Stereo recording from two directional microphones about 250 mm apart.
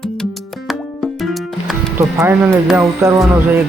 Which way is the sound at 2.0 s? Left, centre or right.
Centre.